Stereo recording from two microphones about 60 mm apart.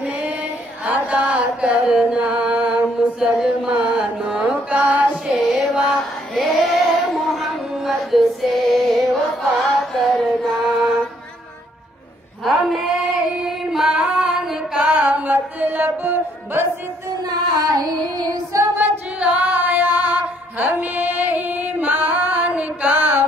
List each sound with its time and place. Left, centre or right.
0.0 s chant: centre
5.2 s music: centre
5.9 s female singing: centre
12.6 s female singing: centre
14.9 s music: right
17.2 s child singing: right
18.8 s female singing: right